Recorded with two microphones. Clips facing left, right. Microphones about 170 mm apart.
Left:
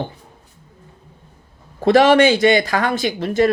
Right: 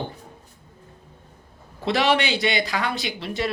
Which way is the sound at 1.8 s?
45° left (ahead or behind).